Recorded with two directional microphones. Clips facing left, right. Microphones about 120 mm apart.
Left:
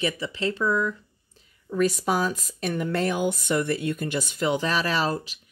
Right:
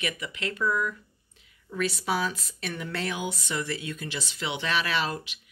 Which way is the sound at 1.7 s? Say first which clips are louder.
Left 5 dB; 45° left (ahead or behind).